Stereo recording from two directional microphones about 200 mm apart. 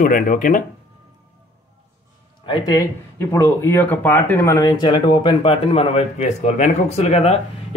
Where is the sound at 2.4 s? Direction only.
20° left (ahead or behind).